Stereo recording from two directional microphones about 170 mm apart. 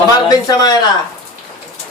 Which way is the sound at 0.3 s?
20° left (ahead or behind).